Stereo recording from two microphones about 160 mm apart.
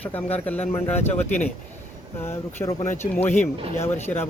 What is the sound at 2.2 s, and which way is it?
A man's voice, 15° left (ahead or behind).